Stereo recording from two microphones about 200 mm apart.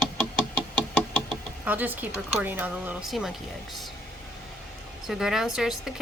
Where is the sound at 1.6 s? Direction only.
10° right (ahead or behind).